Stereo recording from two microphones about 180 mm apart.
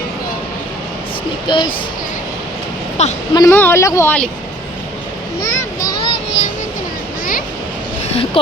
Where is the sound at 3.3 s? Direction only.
15° left (ahead or behind).